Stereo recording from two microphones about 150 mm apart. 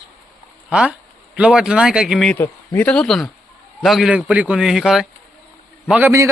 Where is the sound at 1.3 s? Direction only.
5° right (ahead or behind).